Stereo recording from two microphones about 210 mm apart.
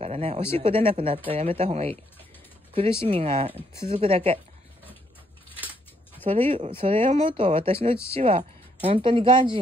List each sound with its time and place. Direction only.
0.0 s speech: 30° right (ahead or behind)
6.2 s speech: 30° right (ahead or behind)